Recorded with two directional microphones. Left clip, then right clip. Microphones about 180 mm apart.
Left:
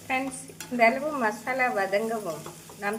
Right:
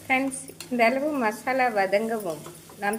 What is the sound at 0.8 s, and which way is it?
A woman's voice, 25° right (ahead or behind).